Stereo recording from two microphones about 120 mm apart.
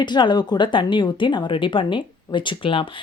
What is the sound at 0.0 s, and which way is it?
A woman's voice, 40° left (ahead or behind).